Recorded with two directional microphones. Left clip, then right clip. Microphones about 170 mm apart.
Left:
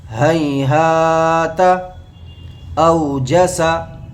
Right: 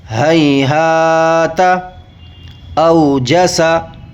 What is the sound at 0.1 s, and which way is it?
Mantra, 30° right (ahead or behind).